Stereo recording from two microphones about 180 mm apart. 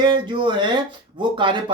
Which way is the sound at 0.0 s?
25° right (ahead or behind).